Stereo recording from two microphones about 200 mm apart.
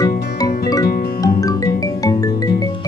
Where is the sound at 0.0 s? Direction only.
20° left (ahead or behind).